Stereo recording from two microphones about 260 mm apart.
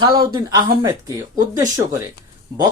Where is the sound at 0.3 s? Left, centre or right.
Centre.